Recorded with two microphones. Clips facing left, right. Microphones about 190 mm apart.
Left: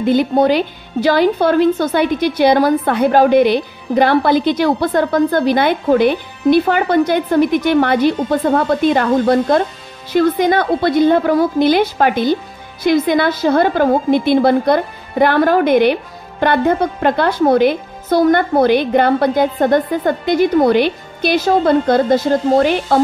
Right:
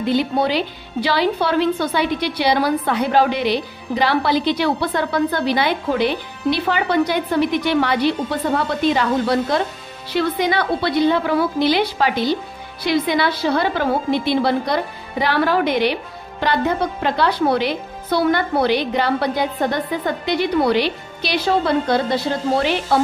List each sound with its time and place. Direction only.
0.0 s a woman's voice: 50° left (ahead or behind)